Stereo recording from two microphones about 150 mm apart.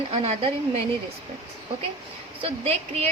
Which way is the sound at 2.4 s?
40° right (ahead or behind).